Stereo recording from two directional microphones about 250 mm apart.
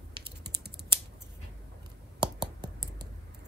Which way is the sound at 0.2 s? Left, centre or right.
Right.